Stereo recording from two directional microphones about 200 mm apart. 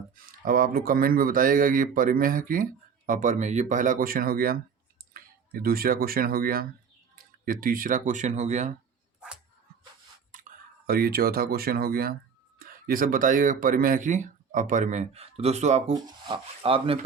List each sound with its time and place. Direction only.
0.3 s speech: 45° right (ahead or behind)
10.8 s speech: 50° right (ahead or behind)
16.0 s speech: 25° right (ahead or behind)